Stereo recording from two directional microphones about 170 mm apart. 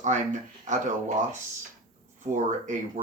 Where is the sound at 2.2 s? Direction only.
45° right (ahead or behind).